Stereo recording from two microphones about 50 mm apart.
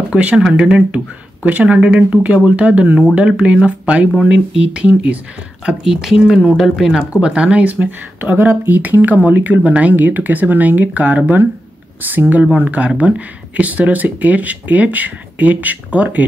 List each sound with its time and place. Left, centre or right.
0.1 s speech: right
5.7 s speech: centre
8.2 s speech: right